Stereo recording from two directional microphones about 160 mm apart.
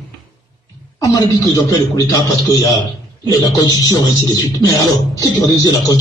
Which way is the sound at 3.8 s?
25° left (ahead or behind).